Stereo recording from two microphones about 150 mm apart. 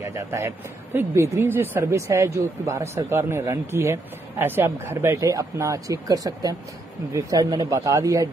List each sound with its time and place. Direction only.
0.0 s a man's voice: 15° right (ahead or behind)